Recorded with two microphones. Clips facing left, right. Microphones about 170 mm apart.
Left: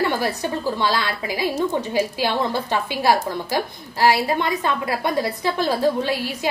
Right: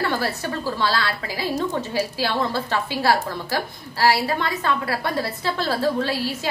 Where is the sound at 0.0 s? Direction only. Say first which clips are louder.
Left 2 dB; 15° left (ahead or behind).